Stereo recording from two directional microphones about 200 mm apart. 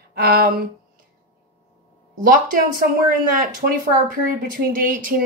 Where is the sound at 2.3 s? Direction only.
45° right (ahead or behind).